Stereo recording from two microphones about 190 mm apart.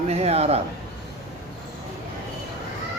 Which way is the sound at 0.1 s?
35° right (ahead or behind).